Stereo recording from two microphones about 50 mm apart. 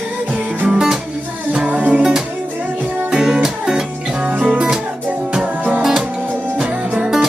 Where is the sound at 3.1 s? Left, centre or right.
Centre.